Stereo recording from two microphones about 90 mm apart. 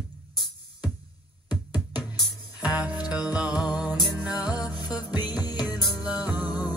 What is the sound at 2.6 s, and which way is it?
Music, 15° right (ahead or behind).